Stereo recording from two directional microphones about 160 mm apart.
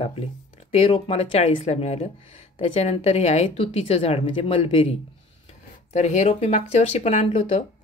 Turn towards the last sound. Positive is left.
turn(degrees=40)  # may be behind; listen again after turning